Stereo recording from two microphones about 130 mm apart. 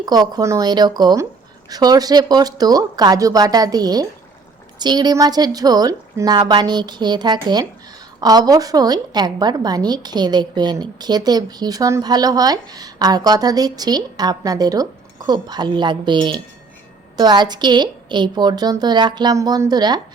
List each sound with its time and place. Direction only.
0.0 s a woman's voice: 30° right (ahead or behind)